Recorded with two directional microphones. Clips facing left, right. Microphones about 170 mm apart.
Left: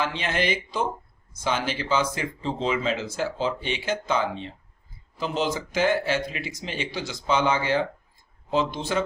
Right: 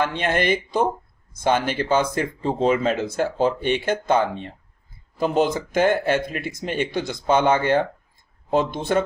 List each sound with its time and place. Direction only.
0.0 s speech: 55° right (ahead or behind)